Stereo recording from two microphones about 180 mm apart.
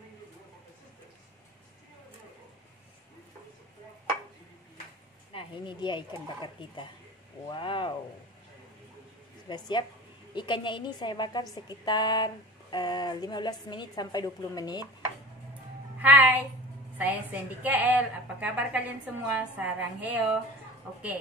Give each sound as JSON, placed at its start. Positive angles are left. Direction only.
{"t": 5.3, "sound": "a woman's voice", "side_deg": 30}
{"t": 9.5, "sound": "a woman's voice", "side_deg": 25}
{"t": 16.0, "sound": "a woman's voice", "side_deg": -10}